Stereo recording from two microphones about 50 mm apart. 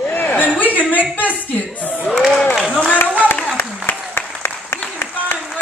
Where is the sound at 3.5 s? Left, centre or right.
Left.